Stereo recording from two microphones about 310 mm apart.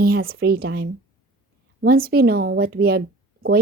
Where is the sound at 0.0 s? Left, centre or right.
Right.